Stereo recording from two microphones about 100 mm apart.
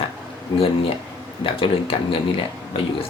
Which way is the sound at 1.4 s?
65° left (ahead or behind).